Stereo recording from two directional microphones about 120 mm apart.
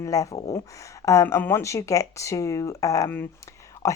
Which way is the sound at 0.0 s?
25° left (ahead or behind).